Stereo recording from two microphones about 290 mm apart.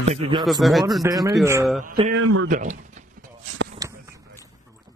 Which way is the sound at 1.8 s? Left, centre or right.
Right.